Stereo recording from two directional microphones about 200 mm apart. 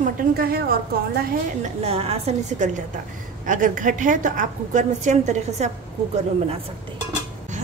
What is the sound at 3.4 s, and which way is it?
A woman's voice, 40° right (ahead or behind).